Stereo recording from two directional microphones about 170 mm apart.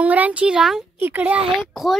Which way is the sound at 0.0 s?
10° right (ahead or behind).